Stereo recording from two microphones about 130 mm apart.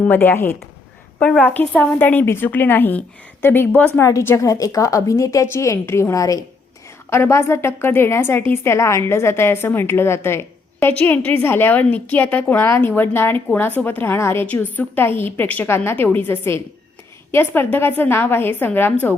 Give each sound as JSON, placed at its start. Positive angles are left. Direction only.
{"t": 0.0, "sound": "a woman's voice", "side_deg": 15}